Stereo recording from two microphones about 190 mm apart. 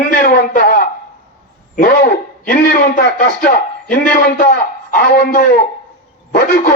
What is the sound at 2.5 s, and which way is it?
A man's voice, 50° left (ahead or behind).